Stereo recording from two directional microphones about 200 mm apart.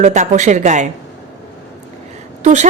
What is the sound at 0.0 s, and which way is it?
Speech, 35° right (ahead or behind).